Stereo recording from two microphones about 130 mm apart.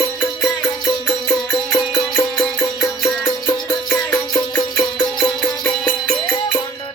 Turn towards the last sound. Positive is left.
turn(degrees=5)  # may be behind; listen again after turning